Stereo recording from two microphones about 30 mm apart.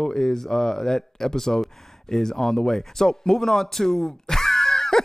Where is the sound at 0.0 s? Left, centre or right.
Centre.